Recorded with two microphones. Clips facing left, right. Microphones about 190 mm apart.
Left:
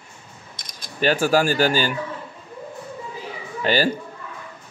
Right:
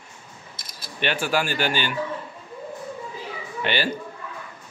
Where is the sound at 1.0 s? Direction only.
40° left (ahead or behind).